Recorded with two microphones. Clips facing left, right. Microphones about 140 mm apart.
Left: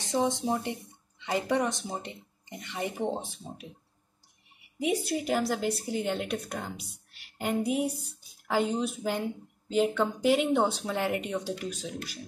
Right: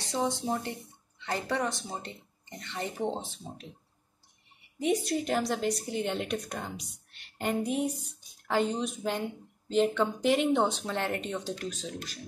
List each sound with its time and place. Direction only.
0.0 s speech: 20° left (ahead or behind)
4.7 s speech: 5° left (ahead or behind)